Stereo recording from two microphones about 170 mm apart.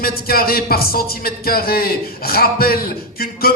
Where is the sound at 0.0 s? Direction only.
60° left (ahead or behind).